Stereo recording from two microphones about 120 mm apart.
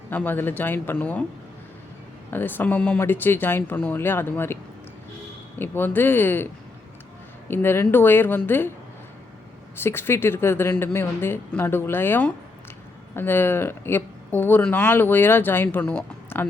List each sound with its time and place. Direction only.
0.1 s speech: 15° left (ahead or behind)
2.3 s speech: 15° left (ahead or behind)
5.5 s speech: 15° left (ahead or behind)
9.7 s speech: 20° left (ahead or behind)